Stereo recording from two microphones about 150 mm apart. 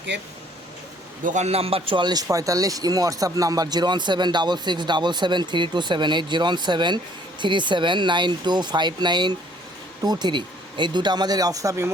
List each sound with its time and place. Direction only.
1.2 s a man's voice: 55° right (ahead or behind); by 11.9 s 20° right (ahead or behind)